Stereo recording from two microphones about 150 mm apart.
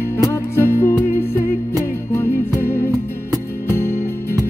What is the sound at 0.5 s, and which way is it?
Music, 15° left (ahead or behind).